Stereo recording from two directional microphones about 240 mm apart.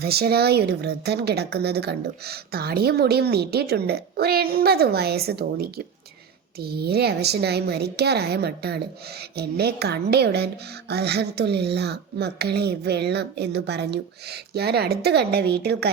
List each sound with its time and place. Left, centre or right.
0.0 s speech: right